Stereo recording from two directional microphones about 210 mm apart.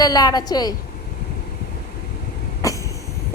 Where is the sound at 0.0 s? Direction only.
20° left (ahead or behind).